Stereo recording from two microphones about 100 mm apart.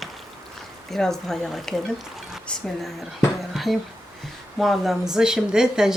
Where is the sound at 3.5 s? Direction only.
Centre (ahead or behind).